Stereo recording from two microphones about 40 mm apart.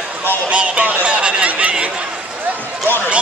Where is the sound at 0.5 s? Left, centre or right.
Right.